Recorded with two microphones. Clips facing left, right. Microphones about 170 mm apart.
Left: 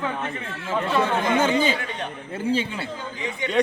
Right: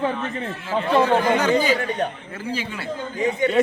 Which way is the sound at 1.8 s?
45° right (ahead or behind).